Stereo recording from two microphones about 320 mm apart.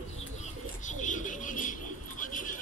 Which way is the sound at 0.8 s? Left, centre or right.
Left.